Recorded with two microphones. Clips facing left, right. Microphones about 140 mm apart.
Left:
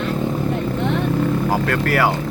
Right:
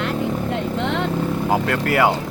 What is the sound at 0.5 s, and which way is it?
Vehicle, 90° right.